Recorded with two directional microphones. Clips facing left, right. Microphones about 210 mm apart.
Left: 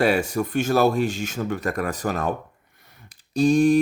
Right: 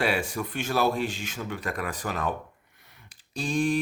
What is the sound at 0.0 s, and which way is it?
Speech, 40° left (ahead or behind).